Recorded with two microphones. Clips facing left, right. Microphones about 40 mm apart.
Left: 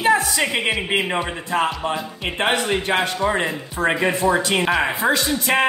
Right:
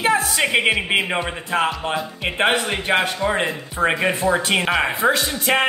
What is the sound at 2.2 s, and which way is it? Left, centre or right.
Speech, centre.